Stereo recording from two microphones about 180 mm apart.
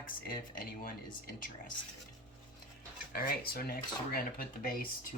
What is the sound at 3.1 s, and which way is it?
Speech, 55° left (ahead or behind).